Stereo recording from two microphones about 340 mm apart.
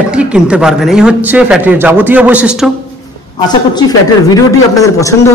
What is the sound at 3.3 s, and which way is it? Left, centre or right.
A man's voice, centre.